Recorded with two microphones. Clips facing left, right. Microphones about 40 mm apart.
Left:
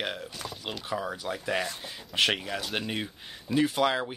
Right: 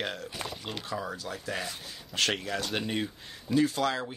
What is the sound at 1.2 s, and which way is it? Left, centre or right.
Speech, left.